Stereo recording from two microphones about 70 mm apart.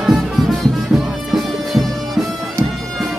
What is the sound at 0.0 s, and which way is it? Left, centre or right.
Music, centre.